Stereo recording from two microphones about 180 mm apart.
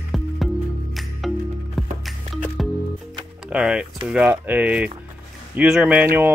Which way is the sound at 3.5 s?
5° right (ahead or behind).